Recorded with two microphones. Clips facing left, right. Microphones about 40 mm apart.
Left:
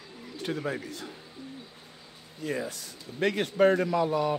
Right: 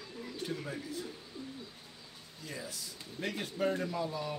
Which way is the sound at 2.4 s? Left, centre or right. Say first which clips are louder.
Left 11 dB; left.